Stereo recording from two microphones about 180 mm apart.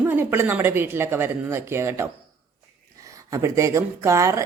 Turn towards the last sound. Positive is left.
turn(degrees=-15)  # may be behind; listen again after turning